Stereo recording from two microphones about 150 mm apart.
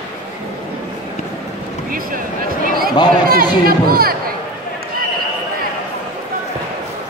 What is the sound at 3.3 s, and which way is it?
Speech, 80° right.